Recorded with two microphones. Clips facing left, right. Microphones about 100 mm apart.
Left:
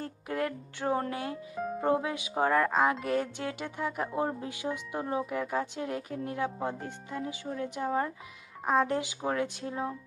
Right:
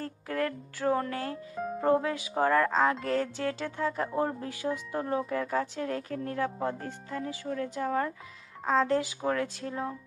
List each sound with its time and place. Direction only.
0.0 s speech: 20° left (ahead or behind)
1.5 s speech: centre (ahead or behind)
1.8 s speech: 20° left (ahead or behind)